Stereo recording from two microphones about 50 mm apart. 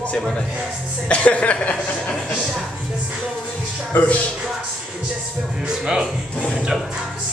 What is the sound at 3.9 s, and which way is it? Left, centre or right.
Speech, left.